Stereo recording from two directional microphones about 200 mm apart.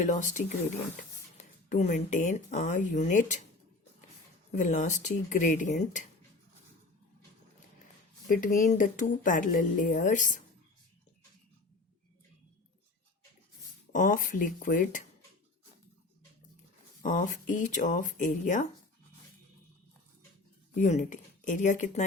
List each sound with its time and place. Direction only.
0.0 s speech: 40° left (ahead or behind)
1.7 s speech: 35° left (ahead or behind)
4.5 s speech: 40° left (ahead or behind)
8.3 s speech: 40° left (ahead or behind)
13.9 s speech: 40° left (ahead or behind)
17.0 s speech: 40° left (ahead or behind)
20.7 s speech: 35° left (ahead or behind)